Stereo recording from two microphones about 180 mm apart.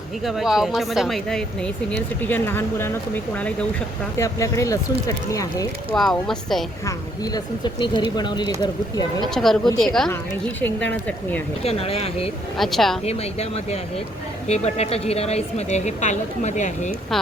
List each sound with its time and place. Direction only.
0.3 s speech: centre (ahead or behind)
4.2 s speech: 15° left (ahead or behind)
5.9 s speech: 5° left (ahead or behind)
6.8 s speech: 20° left (ahead or behind)
9.2 s speech: centre (ahead or behind)
11.6 s a woman's voice: 35° left (ahead or behind)
12.5 s speech: centre (ahead or behind)
13.1 s a woman's voice: 35° left (ahead or behind)